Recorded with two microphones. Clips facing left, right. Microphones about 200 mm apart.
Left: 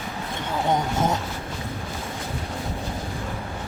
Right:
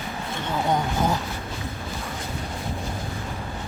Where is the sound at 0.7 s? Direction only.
20° left (ahead or behind).